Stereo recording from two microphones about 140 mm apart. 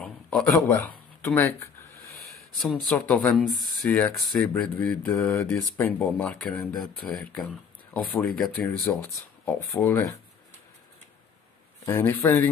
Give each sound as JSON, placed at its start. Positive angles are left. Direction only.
{"t": 0.0, "sound": "a sound", "side_deg": 5}
{"t": 2.5, "sound": "speech", "side_deg": 0}
{"t": 9.0, "sound": "speech", "side_deg": 20}
{"t": 11.8, "sound": "speech", "side_deg": 15}